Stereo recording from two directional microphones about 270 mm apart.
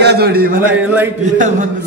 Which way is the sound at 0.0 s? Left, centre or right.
Right.